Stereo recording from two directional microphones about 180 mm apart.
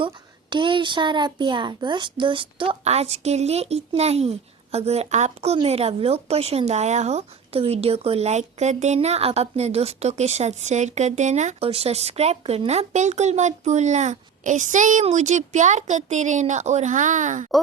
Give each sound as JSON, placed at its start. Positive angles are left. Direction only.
{"t": 0.5, "sound": "a child's voice", "side_deg": -25}